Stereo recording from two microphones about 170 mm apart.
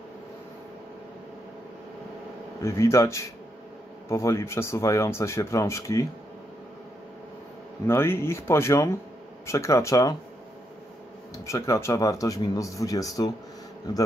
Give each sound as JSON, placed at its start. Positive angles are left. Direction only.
{"t": 2.6, "sound": "speech", "side_deg": 15}
{"t": 7.8, "sound": "speech", "side_deg": 15}
{"t": 11.3, "sound": "speech", "side_deg": 20}